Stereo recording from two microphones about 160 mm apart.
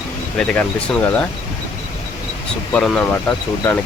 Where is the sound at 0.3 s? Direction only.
5° left (ahead or behind).